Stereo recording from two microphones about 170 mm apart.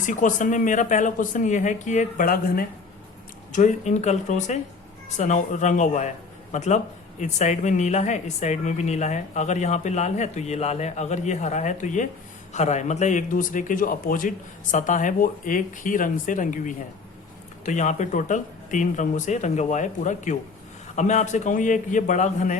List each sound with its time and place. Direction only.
0.0 s speech: 50° left (ahead or behind)
3.5 s speech: 45° left (ahead or behind)